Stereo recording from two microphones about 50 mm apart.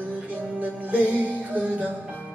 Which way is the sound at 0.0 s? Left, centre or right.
Right.